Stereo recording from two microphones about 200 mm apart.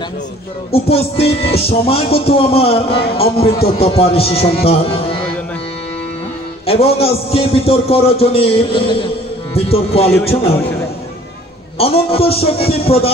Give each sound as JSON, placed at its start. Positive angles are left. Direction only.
{"t": 0.7, "sound": "a man's voice", "side_deg": 30}
{"t": 6.6, "sound": "a man's voice", "side_deg": 30}
{"t": 11.8, "sound": "a man's voice", "side_deg": 30}